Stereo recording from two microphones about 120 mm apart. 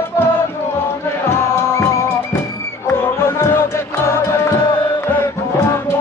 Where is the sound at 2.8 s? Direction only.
20° left (ahead or behind).